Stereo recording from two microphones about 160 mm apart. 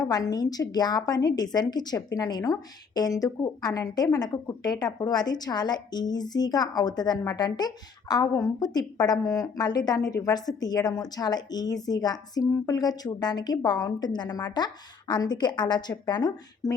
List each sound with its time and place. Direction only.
0.0 s a woman's voice: 20° left (ahead or behind)